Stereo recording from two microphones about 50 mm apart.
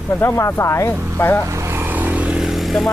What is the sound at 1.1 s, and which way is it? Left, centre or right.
Speech, left.